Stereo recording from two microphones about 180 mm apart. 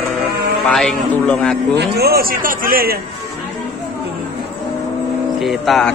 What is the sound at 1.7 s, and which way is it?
A man's voice, 65° right (ahead or behind).